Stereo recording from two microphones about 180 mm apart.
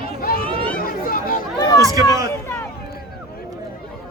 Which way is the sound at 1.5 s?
20° left (ahead or behind).